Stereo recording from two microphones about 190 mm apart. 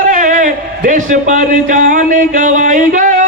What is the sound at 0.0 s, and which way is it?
A man's voice, 45° right (ahead or behind).